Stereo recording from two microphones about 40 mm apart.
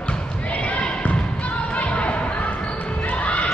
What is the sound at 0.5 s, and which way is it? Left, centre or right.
Basketball bounce, left.